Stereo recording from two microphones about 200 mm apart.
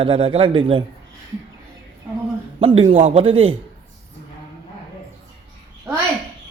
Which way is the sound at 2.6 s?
30° right (ahead or behind).